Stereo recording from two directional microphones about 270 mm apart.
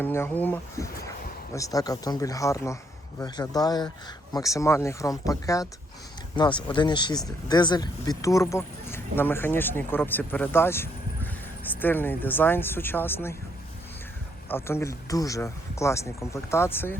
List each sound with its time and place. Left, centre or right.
0.0 s speech: centre
14.5 s speech: centre